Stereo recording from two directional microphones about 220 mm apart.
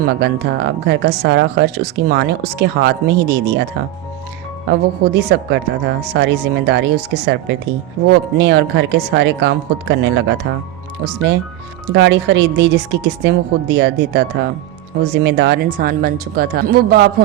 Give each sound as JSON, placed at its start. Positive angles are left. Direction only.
{"t": 0.0, "sound": "speech", "side_deg": -50}